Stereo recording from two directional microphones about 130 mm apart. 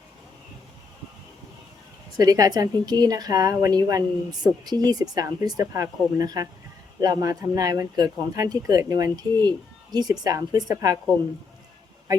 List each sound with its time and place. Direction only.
2.1 s a woman's voice: 30° right (ahead or behind)